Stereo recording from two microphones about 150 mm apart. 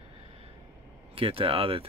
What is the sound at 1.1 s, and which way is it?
Speech, 40° right (ahead or behind).